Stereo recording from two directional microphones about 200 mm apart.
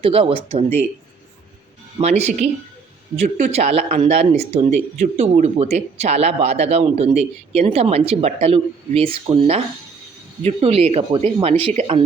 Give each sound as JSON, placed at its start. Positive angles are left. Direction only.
{"t": 0.0, "sound": "speech", "side_deg": -30}
{"t": 2.0, "sound": "speech", "side_deg": -35}